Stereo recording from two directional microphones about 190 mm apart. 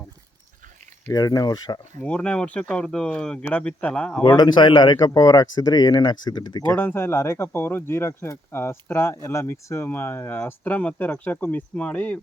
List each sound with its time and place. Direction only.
1.0 s speech: 20° left (ahead or behind)
2.0 s speech: 5° left (ahead or behind)
4.2 s speech: 25° left (ahead or behind)
6.7 s speech: 10° left (ahead or behind)